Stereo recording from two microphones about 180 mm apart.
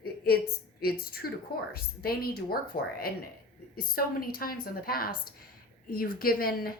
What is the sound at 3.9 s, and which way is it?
A woman's voice, 55° left (ahead or behind).